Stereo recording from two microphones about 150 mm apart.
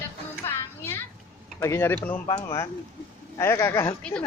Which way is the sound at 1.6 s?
15° left (ahead or behind).